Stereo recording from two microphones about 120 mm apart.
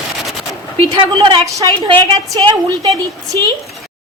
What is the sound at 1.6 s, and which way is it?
Stir, 40° right (ahead or behind).